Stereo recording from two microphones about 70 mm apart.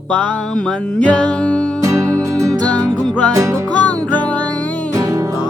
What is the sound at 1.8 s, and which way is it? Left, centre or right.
Music, right.